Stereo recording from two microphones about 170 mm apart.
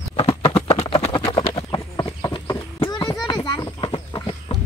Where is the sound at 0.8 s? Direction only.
30° left (ahead or behind).